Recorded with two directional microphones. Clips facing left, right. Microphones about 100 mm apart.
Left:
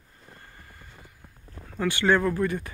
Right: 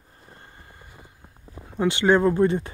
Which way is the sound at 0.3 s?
20° right (ahead or behind).